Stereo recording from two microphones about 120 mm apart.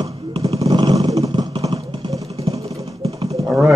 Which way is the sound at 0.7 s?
35° right (ahead or behind).